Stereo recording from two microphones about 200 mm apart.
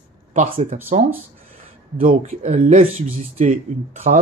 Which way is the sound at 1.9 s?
40° right (ahead or behind).